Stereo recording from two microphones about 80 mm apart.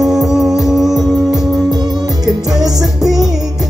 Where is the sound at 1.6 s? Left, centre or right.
Right.